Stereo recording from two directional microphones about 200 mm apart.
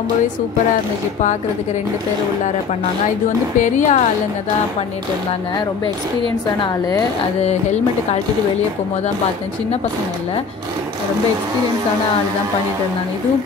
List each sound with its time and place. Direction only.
3.5 s a woman's voice: 40° left (ahead or behind)